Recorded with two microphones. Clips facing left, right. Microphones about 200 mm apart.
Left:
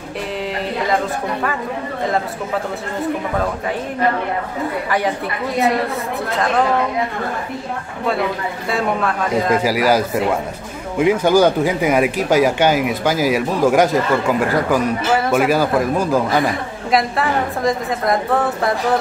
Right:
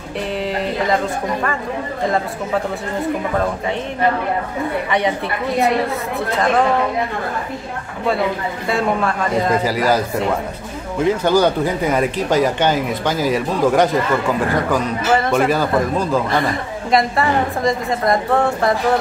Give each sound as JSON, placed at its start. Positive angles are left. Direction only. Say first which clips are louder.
{"t": 8.6, "sound": "a man's voice", "louder": "right 1 dB", "side_deg": 0}